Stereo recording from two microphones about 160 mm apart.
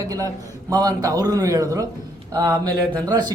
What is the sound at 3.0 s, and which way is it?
Speech, 25° right (ahead or behind).